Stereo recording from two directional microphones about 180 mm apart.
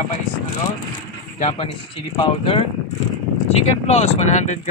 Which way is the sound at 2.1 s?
30° left (ahead or behind).